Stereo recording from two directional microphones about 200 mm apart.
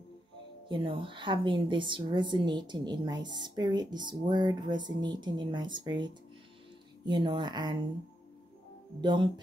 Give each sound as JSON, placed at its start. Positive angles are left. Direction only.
{"t": 0.7, "sound": "a woman's voice", "side_deg": -25}
{"t": 9.0, "sound": "a woman's voice", "side_deg": -20}